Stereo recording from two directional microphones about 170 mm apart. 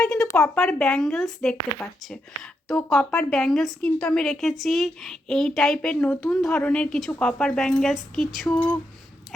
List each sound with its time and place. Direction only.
0.0 s a sound: 5° left (ahead or behind)
0.3 s speech: 15° left (ahead or behind)
0.6 s a woman's voice: 5° left (ahead or behind)